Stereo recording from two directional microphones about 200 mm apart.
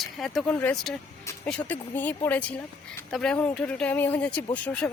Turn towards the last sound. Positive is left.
turn(degrees=5)  # may be behind; listen again after turning